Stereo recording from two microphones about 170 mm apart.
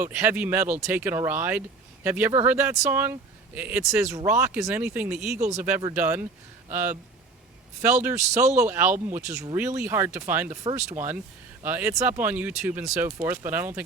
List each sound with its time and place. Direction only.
0.0 s speech: 10° right (ahead or behind)
5.4 s speech: 40° right (ahead or behind)
5.9 s speech: 10° right (ahead or behind)
8.4 s speech: 45° right (ahead or behind)
8.7 s speech: 10° right (ahead or behind)